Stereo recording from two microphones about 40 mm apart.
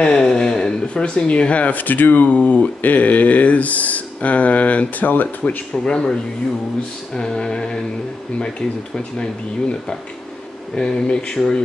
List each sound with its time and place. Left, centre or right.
0.0 s speech: left
5.9 s speech: left
7.2 s speech: centre